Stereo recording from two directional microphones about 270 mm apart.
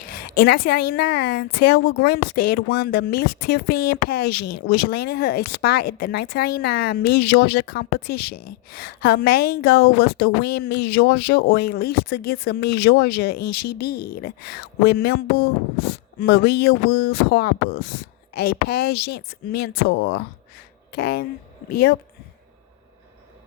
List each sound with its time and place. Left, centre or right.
0.0 s a woman's voice: left